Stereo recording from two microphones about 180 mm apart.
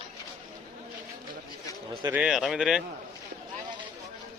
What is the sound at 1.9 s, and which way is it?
Speech, 25° right (ahead or behind).